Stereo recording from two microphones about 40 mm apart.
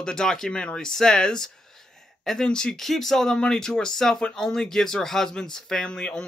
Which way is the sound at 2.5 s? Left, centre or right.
Centre.